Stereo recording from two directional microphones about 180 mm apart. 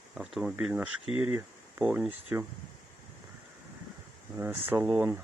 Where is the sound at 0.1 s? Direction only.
5° right (ahead or behind).